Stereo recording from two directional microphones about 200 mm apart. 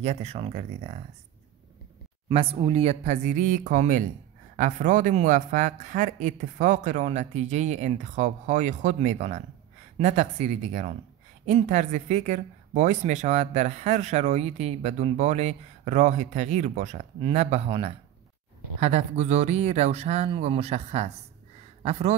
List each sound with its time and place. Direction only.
0.0 s speech: 35° right (ahead or behind)
2.2 s speech: 25° right (ahead or behind)